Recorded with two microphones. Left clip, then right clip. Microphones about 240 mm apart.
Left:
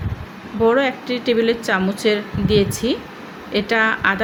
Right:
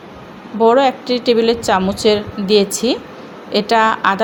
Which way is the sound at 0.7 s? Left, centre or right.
Centre.